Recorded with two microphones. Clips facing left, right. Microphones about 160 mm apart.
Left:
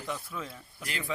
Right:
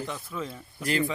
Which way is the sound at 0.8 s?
40° right (ahead or behind).